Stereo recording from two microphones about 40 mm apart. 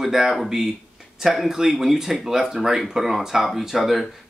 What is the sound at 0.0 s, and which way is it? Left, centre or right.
Speech, centre.